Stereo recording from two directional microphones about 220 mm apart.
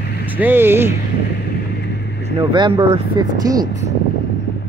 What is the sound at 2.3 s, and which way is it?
Speech, 25° right (ahead or behind).